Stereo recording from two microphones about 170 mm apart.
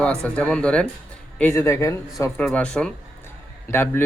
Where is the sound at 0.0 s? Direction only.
5° left (ahead or behind).